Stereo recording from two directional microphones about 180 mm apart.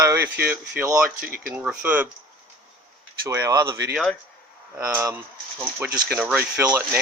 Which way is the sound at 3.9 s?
5° left (ahead or behind).